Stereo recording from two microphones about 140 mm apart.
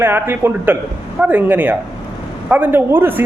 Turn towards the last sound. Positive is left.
turn(degrees=-15)  # may be behind; listen again after turning